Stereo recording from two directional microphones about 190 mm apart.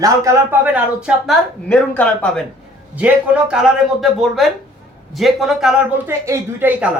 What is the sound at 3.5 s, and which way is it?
A man's voice, centre (ahead or behind).